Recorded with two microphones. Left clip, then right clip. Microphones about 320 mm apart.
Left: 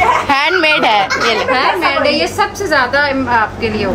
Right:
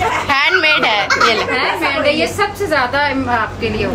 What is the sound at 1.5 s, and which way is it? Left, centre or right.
A woman's voice, left.